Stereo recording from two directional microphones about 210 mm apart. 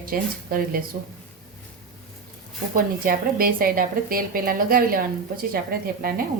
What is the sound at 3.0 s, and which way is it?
A woman's voice, 45° right (ahead or behind).